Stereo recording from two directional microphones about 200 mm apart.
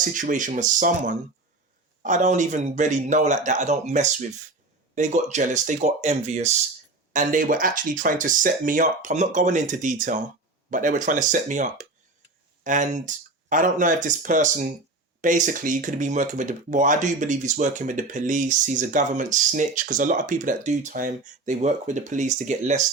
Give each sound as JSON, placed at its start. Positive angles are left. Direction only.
{"t": 0.1, "sound": "speech", "side_deg": -40}